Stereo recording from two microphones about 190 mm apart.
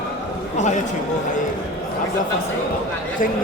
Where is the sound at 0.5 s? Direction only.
40° left (ahead or behind).